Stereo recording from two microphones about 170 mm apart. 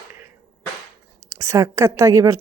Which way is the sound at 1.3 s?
15° right (ahead or behind).